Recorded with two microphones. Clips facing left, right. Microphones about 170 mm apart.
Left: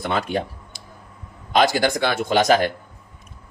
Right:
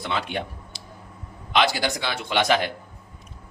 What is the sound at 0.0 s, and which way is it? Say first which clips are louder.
A man's voice: left 5 dB; 45° left (ahead or behind).